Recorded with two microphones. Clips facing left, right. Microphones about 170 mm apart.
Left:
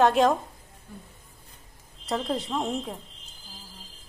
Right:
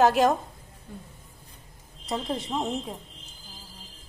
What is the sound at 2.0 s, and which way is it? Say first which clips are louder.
Speech: left 2 dB; centre (ahead or behind).